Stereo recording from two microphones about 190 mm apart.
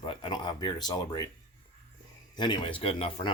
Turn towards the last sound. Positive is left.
turn(degrees=30)  # may be behind; listen again after turning